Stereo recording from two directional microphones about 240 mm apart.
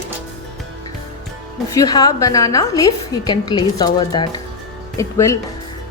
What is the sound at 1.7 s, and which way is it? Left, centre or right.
A woman's voice, centre.